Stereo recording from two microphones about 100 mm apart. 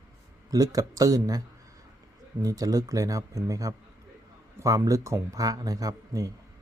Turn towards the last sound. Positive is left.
turn(degrees=-35)  # may be behind; listen again after turning